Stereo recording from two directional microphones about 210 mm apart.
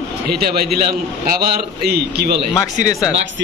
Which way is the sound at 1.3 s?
45° right (ahead or behind).